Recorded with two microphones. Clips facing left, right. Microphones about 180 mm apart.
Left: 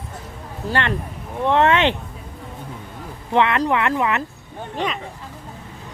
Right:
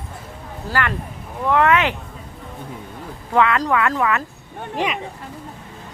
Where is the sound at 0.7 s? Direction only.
25° left (ahead or behind).